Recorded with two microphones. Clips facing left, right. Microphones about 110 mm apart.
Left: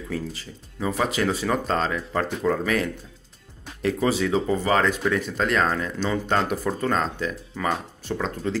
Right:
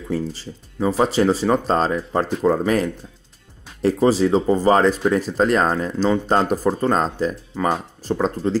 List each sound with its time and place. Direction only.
0.1 s speech: 30° right (ahead or behind)